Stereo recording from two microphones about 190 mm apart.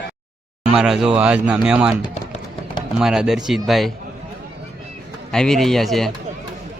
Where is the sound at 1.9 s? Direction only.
35° left (ahead or behind).